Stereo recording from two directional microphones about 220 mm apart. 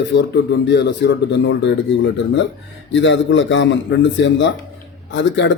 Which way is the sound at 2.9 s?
55° left (ahead or behind).